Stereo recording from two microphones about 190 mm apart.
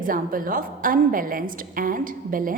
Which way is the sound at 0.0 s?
45° right (ahead or behind).